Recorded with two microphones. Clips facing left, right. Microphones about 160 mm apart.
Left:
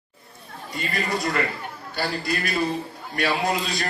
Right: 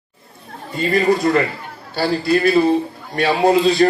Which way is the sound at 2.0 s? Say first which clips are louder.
Right 10 dB; 30° right (ahead or behind).